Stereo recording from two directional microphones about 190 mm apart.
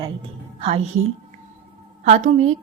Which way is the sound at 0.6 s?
30° right (ahead or behind).